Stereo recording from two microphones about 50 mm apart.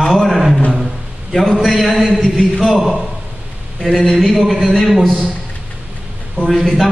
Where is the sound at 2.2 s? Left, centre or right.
Centre.